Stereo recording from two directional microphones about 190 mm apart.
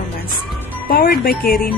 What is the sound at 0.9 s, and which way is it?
Speech, 50° left (ahead or behind).